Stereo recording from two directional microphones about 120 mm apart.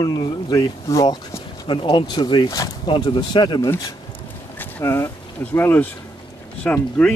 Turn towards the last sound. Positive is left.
turn(degrees=15)  # may be behind; listen again after turning